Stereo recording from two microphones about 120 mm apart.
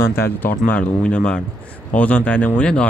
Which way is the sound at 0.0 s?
20° left (ahead or behind).